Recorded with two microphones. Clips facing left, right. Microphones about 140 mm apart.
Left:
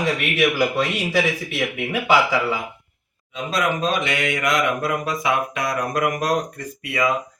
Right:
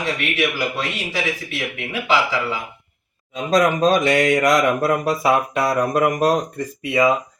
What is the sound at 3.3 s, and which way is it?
Speech, 40° right (ahead or behind).